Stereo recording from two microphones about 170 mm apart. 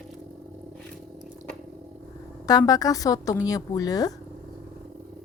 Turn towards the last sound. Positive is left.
turn(degrees=20)  # may be behind; listen again after turning